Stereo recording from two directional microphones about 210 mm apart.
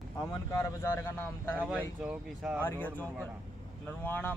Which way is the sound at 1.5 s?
5° right (ahead or behind).